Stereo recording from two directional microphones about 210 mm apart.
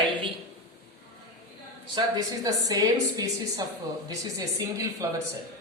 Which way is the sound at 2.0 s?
20° right (ahead or behind).